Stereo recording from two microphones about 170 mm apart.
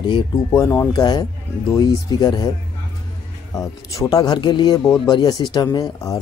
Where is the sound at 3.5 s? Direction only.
20° left (ahead or behind).